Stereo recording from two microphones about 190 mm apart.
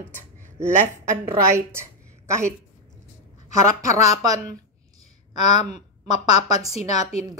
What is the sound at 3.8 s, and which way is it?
Speech, 15° right (ahead or behind).